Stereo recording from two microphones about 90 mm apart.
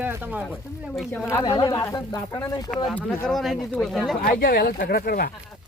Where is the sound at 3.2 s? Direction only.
Centre (ahead or behind).